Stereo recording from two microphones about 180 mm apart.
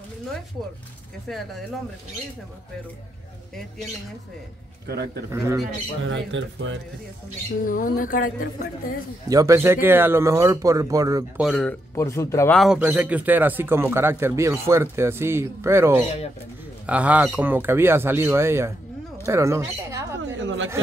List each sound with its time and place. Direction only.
5.3 s speech: 15° right (ahead or behind)
6.0 s speech: 90° right
7.6 s speech: 50° left (ahead or behind)
9.3 s speech: 20° right (ahead or behind)
11.3 s speech: centre (ahead or behind)
11.9 s speech: 15° left (ahead or behind)
12.5 s speech: 5° right (ahead or behind)
20.2 s a sound: 90° right